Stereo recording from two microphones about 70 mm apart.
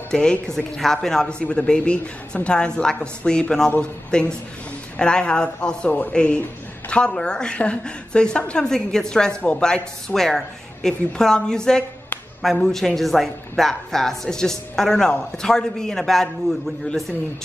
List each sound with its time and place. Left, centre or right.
0.1 s a man's voice: centre